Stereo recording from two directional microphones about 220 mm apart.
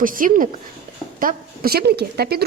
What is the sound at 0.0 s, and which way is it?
A woman's voice, 40° right (ahead or behind).